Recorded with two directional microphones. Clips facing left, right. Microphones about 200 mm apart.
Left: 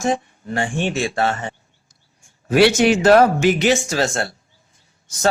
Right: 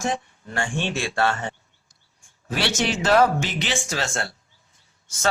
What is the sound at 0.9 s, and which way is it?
Speech, 15° left (ahead or behind).